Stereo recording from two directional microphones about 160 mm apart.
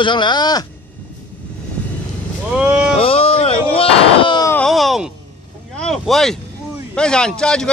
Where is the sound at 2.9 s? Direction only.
35° left (ahead or behind).